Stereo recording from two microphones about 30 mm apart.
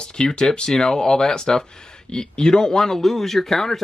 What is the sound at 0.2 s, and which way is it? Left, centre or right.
Speech, left.